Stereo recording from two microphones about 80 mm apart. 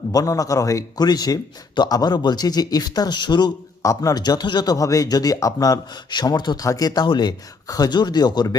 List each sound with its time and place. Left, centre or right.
0.1 s speech: left
3.8 s speech: left
4.2 s speech: left
6.2 s speech: left
6.7 s speech: left
7.1 s speech: left
7.7 s speech: left